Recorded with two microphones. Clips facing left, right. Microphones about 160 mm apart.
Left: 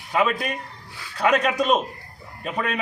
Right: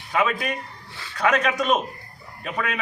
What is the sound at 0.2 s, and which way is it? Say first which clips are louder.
A man's voice: left 1 dB; 35° left (ahead or behind).